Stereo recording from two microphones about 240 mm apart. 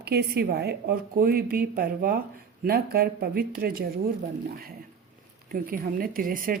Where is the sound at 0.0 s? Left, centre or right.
Right.